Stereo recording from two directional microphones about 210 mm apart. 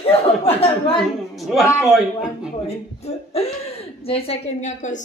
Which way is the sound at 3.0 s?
30° left (ahead or behind).